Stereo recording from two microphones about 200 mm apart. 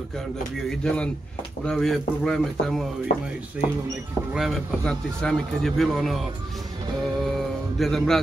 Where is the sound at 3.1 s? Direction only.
40° left (ahead or behind).